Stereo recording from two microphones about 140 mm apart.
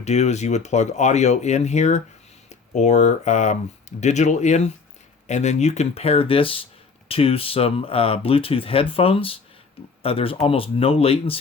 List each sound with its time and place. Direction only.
0.0 s speech: 50° left (ahead or behind)